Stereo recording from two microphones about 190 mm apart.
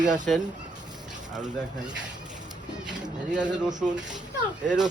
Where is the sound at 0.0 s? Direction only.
40° right (ahead or behind).